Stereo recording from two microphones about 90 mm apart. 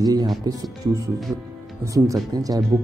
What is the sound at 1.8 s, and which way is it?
Speech, 35° right (ahead or behind).